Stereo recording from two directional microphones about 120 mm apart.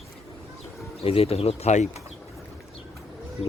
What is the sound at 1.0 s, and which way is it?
Speech, 55° left (ahead or behind).